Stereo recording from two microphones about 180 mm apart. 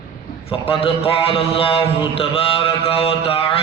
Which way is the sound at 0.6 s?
30° left (ahead or behind).